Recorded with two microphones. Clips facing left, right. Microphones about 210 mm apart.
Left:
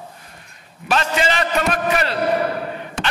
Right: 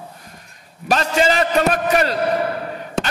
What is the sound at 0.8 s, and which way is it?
A man's voice, 40° right (ahead or behind).